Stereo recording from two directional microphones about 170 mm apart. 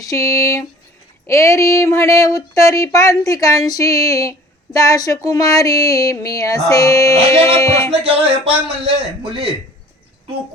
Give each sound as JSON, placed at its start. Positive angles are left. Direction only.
{"t": 0.0, "sound": "speech", "side_deg": 20}
{"t": 7.9, "sound": "music", "side_deg": -35}